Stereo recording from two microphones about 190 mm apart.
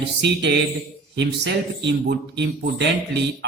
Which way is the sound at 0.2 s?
60° right (ahead or behind).